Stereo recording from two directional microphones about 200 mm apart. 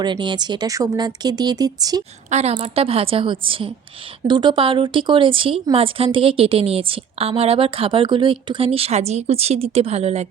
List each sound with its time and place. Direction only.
0.0 s speech: 20° right (ahead or behind)
2.3 s speech: 35° right (ahead or behind)